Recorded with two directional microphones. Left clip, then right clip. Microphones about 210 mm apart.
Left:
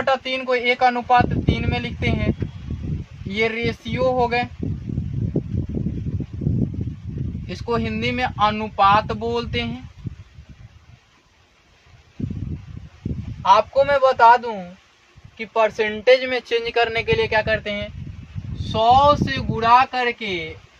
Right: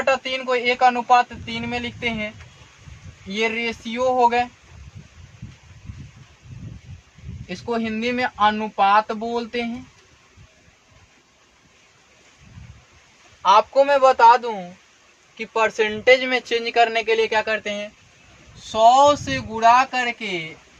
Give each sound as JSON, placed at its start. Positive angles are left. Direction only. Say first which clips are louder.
{"t": 0.0, "sound": "speech", "louder": "even", "side_deg": -15}
{"t": 3.3, "sound": "speech", "louder": "left 1 dB", "side_deg": -15}
{"t": 7.4, "sound": "speech", "louder": "left 1 dB", "side_deg": -10}
{"t": 13.4, "sound": "speech", "louder": "even", "side_deg": -25}
{"t": 15.7, "sound": "speech", "louder": "right 2 dB", "side_deg": -25}